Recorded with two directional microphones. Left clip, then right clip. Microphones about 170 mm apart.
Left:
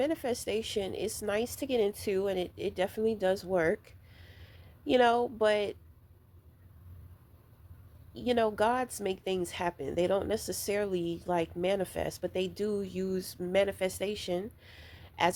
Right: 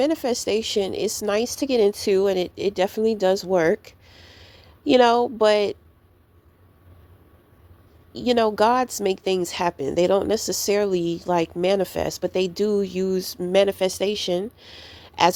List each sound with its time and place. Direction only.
0.0 s speech: 40° right (ahead or behind)
8.1 s speech: 35° right (ahead or behind)